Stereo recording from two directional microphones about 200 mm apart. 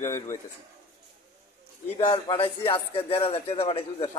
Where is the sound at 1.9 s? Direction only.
25° left (ahead or behind).